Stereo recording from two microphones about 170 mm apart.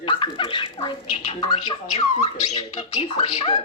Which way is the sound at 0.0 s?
30° left (ahead or behind).